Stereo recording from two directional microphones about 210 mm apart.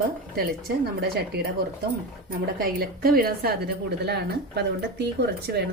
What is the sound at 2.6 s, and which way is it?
A woman's voice, 45° right (ahead or behind).